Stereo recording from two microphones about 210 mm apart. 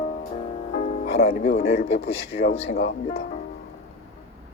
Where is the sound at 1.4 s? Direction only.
30° left (ahead or behind).